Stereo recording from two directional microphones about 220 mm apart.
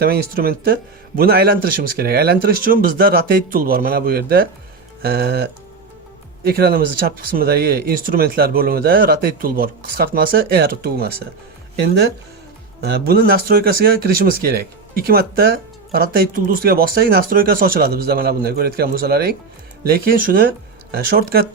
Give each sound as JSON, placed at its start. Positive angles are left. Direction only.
{"t": 0.0, "sound": "speech", "side_deg": -45}
{"t": 12.8, "sound": "speech", "side_deg": -45}